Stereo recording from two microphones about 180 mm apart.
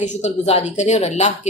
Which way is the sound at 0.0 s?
40° left (ahead or behind).